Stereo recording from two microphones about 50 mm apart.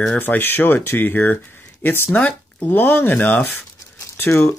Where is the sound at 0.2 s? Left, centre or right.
Left.